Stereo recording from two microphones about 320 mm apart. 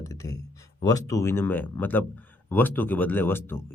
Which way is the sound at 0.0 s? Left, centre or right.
Centre.